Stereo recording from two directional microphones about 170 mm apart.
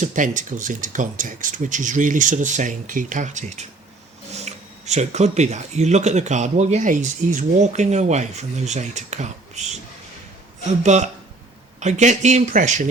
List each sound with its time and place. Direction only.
0.0 s speech: 50° right (ahead or behind)
10.8 s speech: 45° right (ahead or behind)